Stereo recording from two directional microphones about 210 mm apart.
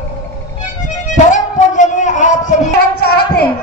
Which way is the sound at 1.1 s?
35° left (ahead or behind).